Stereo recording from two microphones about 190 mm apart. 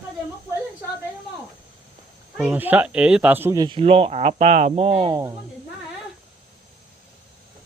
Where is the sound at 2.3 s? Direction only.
5° right (ahead or behind).